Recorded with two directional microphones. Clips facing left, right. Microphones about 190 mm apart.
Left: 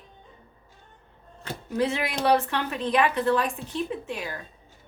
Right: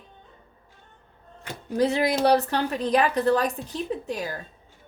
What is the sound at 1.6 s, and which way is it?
A woman's voice, 40° right (ahead or behind).